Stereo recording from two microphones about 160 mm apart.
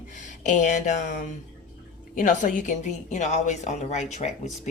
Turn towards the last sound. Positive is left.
turn(degrees=45)  # may be behind; listen again after turning